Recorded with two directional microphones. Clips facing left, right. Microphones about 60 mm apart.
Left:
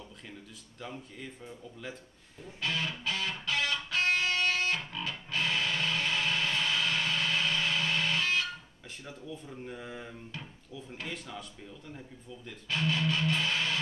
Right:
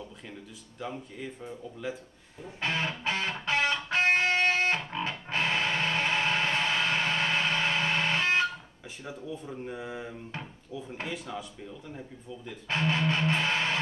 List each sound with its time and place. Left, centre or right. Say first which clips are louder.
0.7 s speech: right 5 dB; centre
2.4 s music: right 3 dB; right
9.7 s speech: right 4 dB; centre
12.6 s music: right 3 dB; right